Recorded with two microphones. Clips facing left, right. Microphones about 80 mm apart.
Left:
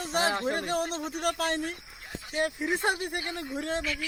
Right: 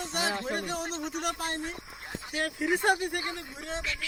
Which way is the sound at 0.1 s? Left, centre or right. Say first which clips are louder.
Left 5 dB; left.